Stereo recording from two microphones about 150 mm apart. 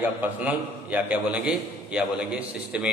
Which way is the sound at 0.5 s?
10° right (ahead or behind).